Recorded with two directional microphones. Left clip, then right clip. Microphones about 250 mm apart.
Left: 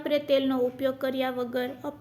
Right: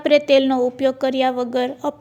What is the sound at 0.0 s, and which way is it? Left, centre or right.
A woman's voice, right.